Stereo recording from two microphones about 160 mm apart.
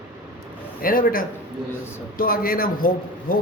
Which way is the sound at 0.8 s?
65° left (ahead or behind).